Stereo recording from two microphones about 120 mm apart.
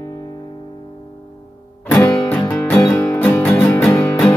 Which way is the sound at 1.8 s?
15° left (ahead or behind).